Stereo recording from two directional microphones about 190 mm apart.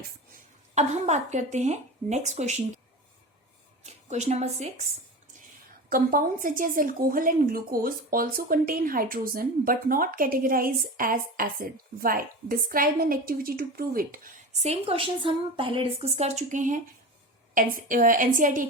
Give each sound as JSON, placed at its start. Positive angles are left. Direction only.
{"t": 0.7, "sound": "a woman's voice", "side_deg": -35}
{"t": 3.8, "sound": "a woman's voice", "side_deg": -35}
{"t": 5.9, "sound": "a woman's voice", "side_deg": -50}
{"t": 14.6, "sound": "a woman's voice", "side_deg": -35}